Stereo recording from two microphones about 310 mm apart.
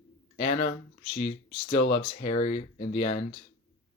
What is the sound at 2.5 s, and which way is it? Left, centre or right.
Speech, left.